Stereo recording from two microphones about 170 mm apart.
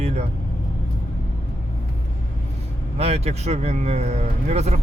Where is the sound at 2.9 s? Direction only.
40° right (ahead or behind).